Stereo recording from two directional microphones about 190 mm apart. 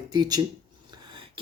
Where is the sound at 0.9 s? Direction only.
25° right (ahead or behind).